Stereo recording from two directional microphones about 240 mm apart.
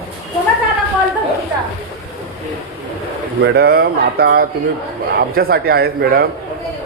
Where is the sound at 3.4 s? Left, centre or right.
Right.